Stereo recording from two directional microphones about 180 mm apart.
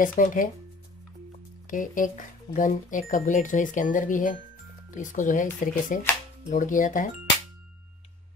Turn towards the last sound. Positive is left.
turn(degrees=45)  # may be behind; listen again after turning